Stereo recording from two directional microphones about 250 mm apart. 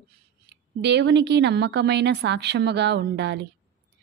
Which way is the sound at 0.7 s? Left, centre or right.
Right.